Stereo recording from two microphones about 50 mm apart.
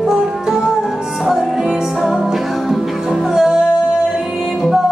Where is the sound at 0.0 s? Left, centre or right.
Centre.